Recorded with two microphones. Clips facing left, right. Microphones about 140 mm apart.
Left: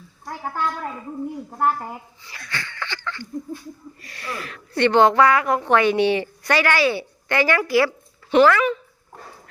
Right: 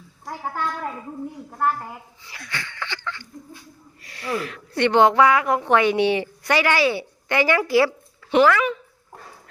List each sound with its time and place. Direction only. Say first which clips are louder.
1.5 s a woman's voice: left 1 dB; 15° left (ahead or behind)
2.3 s a sound: left 1 dB; 10° right (ahead or behind)
4.0 s a woman's voice: right 6 dB; 20° right (ahead or behind)
8.3 s a woman's voice: left 2 dB; 10° right (ahead or behind)